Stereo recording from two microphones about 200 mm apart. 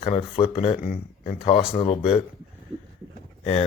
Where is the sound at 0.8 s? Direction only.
40° left (ahead or behind).